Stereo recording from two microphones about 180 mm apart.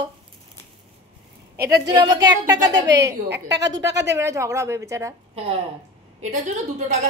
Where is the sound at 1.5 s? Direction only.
60° right (ahead or behind).